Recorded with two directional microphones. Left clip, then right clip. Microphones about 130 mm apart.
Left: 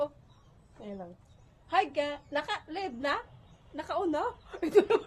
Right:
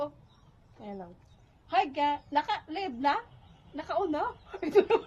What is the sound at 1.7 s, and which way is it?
A woman's voice, 25° left (ahead or behind).